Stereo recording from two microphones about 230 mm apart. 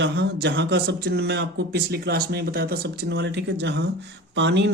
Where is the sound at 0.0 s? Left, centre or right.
Right.